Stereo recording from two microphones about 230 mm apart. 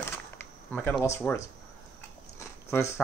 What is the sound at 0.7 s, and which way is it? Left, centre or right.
Speech, centre.